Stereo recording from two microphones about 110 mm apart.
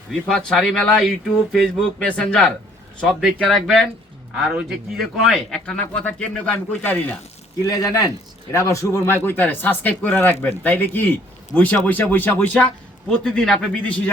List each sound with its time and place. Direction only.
0.3 s a man's voice: 5° left (ahead or behind)
7.6 s speech: 30° left (ahead or behind); by 13.9 s 5° left (ahead or behind)